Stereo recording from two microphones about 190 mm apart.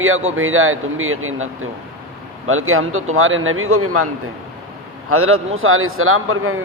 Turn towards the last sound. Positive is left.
turn(degrees=-90)